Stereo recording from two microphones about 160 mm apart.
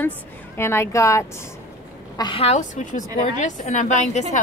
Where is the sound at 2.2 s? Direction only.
30° left (ahead or behind).